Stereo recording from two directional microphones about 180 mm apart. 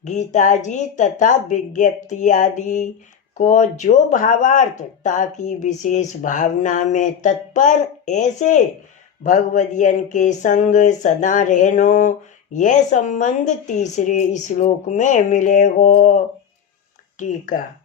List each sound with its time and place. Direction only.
0.0 s speech: 40° left (ahead or behind)